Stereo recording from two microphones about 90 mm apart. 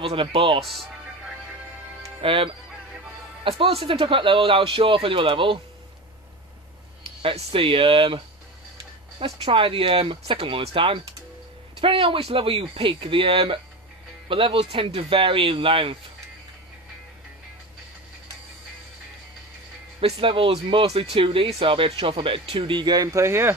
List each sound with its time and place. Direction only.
0.0 s speech: 90° right
2.2 s speech: 75° right (ahead or behind)
3.4 s speech: 90° right; by 5.6 s 70° right (ahead or behind)
7.2 s speech: 80° right
9.2 s speech: 80° right
14.3 s speech: 75° right (ahead or behind)
20.2 s speech: 80° right; by 23.0 s 55° right (ahead or behind)
23.1 s speech: 30° right (ahead or behind)